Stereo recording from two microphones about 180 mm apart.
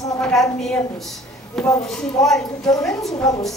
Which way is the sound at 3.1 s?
20° left (ahead or behind).